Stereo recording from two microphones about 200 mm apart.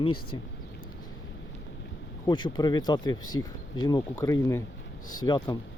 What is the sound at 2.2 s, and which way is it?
Speech, 20° left (ahead or behind).